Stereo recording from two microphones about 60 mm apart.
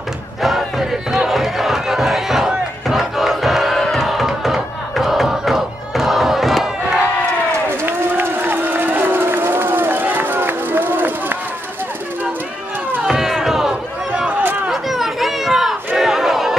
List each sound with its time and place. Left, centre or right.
0.4 s music: centre
4.0 s crowd: centre
7.7 s run: right
13.0 s a sound: centre
14.7 s chatter: centre
16.0 s crowd: centre